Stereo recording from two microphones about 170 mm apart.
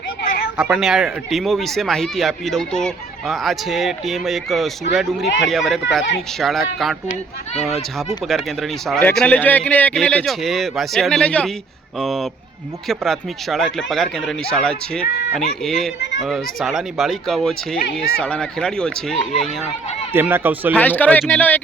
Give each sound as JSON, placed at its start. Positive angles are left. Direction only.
{"t": 0.5, "sound": "speech", "side_deg": -5}
{"t": 7.1, "sound": "speech", "side_deg": 40}
{"t": 7.9, "sound": "a man's voice", "side_deg": 0}
{"t": 20.1, "sound": "speech", "side_deg": -10}
{"t": 20.7, "sound": "a man's voice", "side_deg": 10}